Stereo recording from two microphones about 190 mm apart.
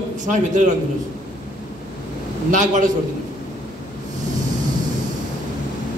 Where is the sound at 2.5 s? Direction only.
40° right (ahead or behind).